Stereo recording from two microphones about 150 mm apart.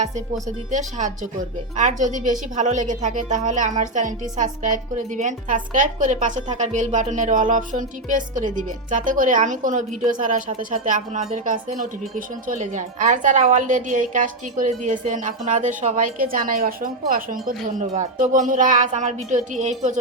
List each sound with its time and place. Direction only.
0.7 s a woman's voice: 55° right (ahead or behind)
17.7 s a woman's voice: 55° right (ahead or behind)